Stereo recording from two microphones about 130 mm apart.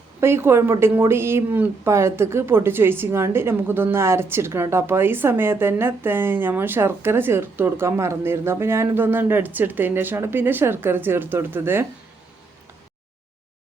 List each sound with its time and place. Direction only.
0.2 s speech: 20° right (ahead or behind)